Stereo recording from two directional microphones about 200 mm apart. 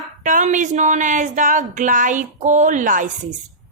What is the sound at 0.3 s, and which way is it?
A woman's voice, 40° right (ahead or behind).